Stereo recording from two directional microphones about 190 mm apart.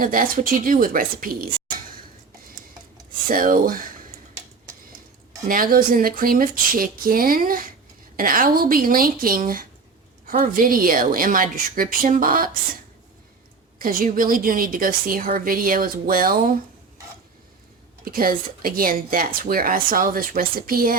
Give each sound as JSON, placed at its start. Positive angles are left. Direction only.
{"t": 0.0, "sound": "a woman's voice", "side_deg": -50}
{"t": 3.2, "sound": "a woman's voice", "side_deg": -45}
{"t": 5.5, "sound": "a woman's voice", "side_deg": -50}
{"t": 13.7, "sound": "a woman's voice", "side_deg": -50}
{"t": 18.0, "sound": "a woman's voice", "side_deg": -50}